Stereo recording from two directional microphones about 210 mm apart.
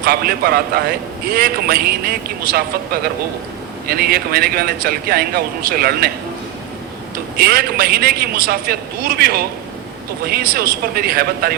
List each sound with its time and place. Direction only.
0.0 s a man's voice: 45° right (ahead or behind)
7.3 s a man's voice: 45° right (ahead or behind)